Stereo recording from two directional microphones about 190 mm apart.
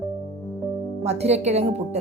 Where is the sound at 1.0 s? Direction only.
35° right (ahead or behind).